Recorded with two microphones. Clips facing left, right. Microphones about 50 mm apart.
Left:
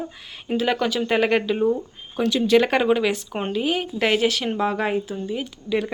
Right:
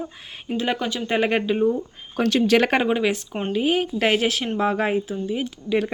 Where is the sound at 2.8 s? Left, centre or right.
Centre.